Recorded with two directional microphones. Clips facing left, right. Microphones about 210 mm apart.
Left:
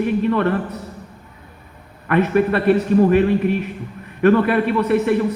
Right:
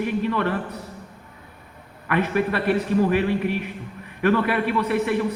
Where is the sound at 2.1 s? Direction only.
50° left (ahead or behind).